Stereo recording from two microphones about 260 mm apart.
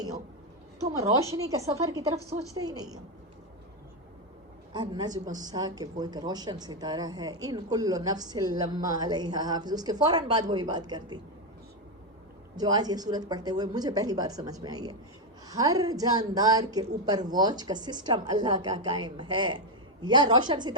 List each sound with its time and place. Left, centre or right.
0.9 s speech: centre
4.7 s speech: centre
12.5 s speech: centre